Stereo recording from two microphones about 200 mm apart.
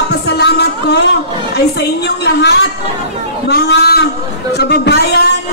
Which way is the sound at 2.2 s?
55° left (ahead or behind).